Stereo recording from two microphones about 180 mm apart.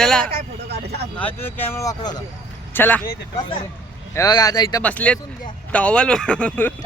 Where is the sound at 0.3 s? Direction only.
60° right (ahead or behind).